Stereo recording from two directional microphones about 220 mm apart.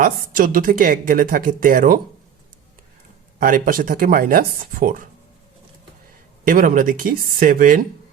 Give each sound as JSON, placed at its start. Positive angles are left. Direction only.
{"t": 0.0, "sound": "speech", "side_deg": -40}
{"t": 3.4, "sound": "speech", "side_deg": -40}
{"t": 6.4, "sound": "speech", "side_deg": -40}